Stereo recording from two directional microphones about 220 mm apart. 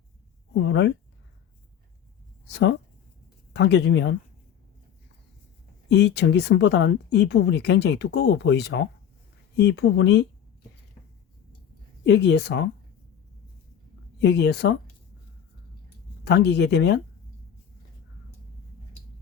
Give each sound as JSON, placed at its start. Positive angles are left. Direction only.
{"t": 0.5, "sound": "speech", "side_deg": 55}
{"t": 2.5, "sound": "speech", "side_deg": 55}
{"t": 5.9, "sound": "speech", "side_deg": 50}
{"t": 12.0, "sound": "speech", "side_deg": 50}
{"t": 14.2, "sound": "speech", "side_deg": 50}
{"t": 16.3, "sound": "speech", "side_deg": 50}